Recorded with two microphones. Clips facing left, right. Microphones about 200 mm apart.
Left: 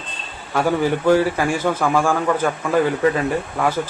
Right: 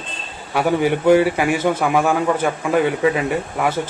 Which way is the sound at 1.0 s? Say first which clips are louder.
Right 3 dB; 15° right (ahead or behind).